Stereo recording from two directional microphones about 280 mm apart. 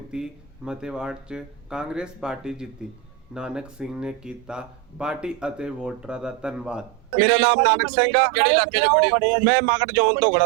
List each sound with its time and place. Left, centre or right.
0.1 s speech: centre